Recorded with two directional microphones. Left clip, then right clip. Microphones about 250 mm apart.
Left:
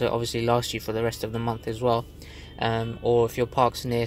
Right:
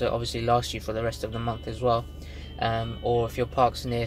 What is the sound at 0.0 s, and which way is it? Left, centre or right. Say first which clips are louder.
Speech: left 2 dB; left.